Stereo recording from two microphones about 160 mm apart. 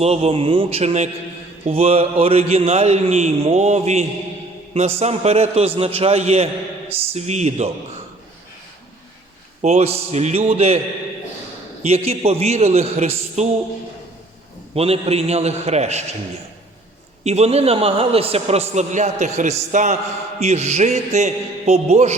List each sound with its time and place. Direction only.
0.0 s a man's voice: 40° right (ahead or behind)
9.6 s a man's voice: 40° right (ahead or behind)
11.8 s a man's voice: 40° right (ahead or behind)
14.8 s a man's voice: 40° right (ahead or behind)
17.2 s a man's voice: 40° right (ahead or behind)